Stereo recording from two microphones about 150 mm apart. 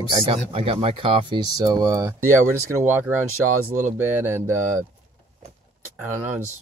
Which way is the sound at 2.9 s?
15° right (ahead or behind).